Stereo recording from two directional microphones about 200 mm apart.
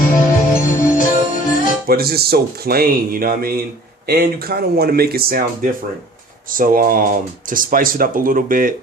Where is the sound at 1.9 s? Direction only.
50° right (ahead or behind).